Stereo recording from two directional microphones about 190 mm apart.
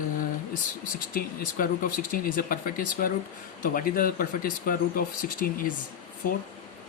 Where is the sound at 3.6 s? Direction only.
45° left (ahead or behind).